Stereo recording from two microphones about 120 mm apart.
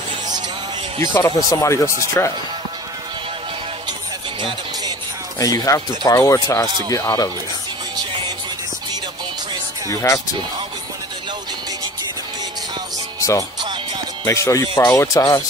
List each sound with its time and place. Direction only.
1.2 s speech: 25° left (ahead or behind)
5.4 s speech: 30° left (ahead or behind)
9.8 s speech: 25° left (ahead or behind)
13.2 s speech: 25° left (ahead or behind)